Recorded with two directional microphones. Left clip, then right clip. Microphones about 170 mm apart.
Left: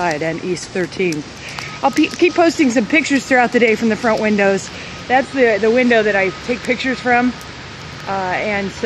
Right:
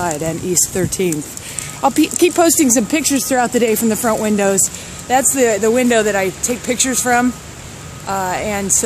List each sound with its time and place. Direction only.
0.0 s speech: 10° right (ahead or behind)